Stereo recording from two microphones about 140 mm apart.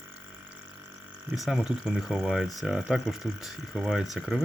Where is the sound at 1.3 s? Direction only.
5° right (ahead or behind).